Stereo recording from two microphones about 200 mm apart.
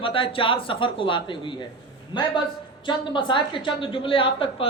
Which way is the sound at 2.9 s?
25° left (ahead or behind).